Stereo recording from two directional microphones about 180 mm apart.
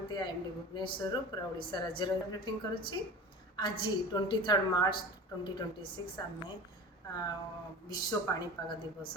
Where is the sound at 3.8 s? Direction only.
25° left (ahead or behind).